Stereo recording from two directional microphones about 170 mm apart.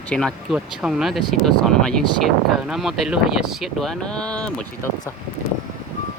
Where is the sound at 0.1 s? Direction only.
5° left (ahead or behind).